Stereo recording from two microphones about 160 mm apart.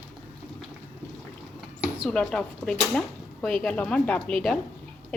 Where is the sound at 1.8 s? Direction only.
5° right (ahead or behind).